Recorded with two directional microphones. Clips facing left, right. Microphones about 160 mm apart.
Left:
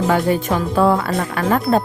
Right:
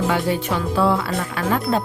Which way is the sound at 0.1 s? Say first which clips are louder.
Left 4 dB; 45° left (ahead or behind).